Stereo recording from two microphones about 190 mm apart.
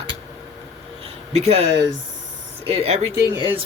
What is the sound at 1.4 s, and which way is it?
Speech, 35° right (ahead or behind).